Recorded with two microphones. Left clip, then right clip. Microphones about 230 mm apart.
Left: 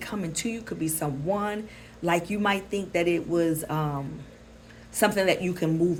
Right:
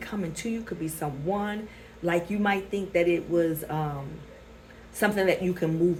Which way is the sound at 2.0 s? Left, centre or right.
Left.